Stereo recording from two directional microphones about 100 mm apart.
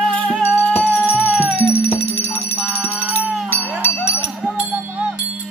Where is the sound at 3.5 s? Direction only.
20° left (ahead or behind).